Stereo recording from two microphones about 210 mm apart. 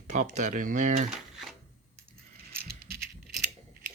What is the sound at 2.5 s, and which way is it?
Rattle, 50° right (ahead or behind).